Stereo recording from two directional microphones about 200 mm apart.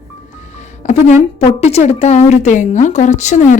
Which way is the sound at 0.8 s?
35° left (ahead or behind).